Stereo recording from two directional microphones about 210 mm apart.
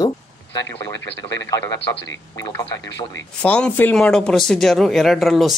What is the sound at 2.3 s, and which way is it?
Speech, 15° left (ahead or behind).